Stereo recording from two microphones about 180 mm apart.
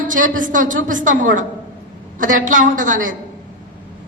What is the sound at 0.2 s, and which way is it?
A woman's voice, 45° right (ahead or behind).